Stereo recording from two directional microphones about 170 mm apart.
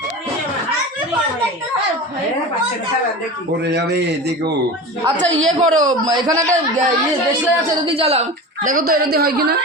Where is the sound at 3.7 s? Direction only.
80° right.